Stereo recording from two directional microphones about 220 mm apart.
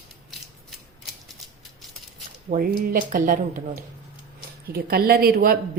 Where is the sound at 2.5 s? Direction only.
40° right (ahead or behind).